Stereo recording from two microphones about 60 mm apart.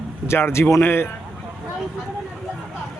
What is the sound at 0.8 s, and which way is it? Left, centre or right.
Speech, left.